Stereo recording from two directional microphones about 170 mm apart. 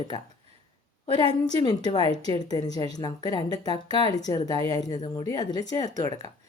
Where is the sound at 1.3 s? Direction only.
25° left (ahead or behind).